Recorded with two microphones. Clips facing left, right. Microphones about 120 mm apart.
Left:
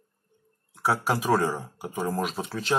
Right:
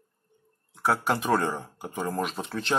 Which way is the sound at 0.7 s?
Centre (ahead or behind).